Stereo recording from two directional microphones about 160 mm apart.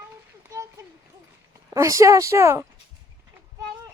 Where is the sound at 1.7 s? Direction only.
20° right (ahead or behind).